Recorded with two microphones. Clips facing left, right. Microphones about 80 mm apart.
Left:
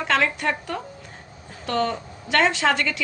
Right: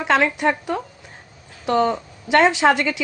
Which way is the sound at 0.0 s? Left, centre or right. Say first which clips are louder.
Right 4 dB; centre.